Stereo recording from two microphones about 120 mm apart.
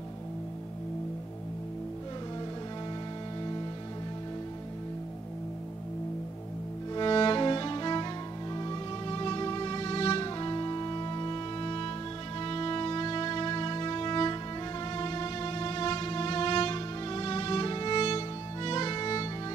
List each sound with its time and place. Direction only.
7.0 s music: 45° left (ahead or behind)
10.2 s music: 40° left (ahead or behind)